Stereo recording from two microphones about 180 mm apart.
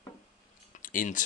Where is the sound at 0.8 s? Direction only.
45° left (ahead or behind).